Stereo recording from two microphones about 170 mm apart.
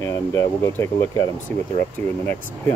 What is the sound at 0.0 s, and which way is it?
Speech, 15° left (ahead or behind).